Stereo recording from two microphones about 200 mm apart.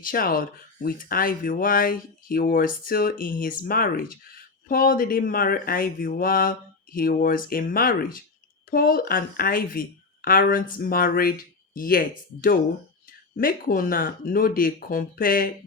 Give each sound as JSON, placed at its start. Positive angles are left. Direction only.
{"t": 0.0, "sound": "speech", "side_deg": 45}